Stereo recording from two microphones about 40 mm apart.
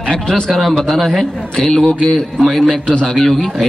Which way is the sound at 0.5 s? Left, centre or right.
Centre.